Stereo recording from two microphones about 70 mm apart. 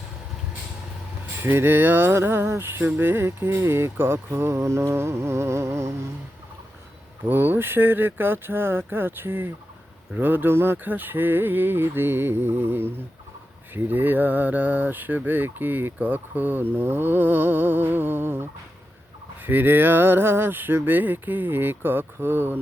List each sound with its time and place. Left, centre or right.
1.4 s speech: right
7.3 s speech: right
13.7 s fowl: right